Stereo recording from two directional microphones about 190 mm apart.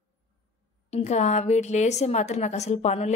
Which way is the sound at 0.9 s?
35° left (ahead or behind).